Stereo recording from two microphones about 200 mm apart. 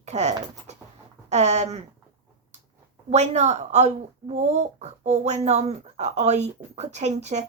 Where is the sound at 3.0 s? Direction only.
35° right (ahead or behind).